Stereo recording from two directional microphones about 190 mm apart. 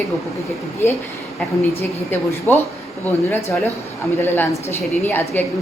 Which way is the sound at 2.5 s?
10° left (ahead or behind).